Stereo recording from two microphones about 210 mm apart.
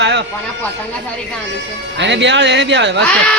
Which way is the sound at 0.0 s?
60° right (ahead or behind).